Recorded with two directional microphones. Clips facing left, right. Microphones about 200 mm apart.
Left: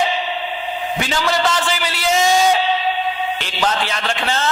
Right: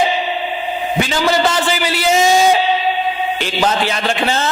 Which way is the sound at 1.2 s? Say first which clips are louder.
Right 3 dB; 10° right (ahead or behind).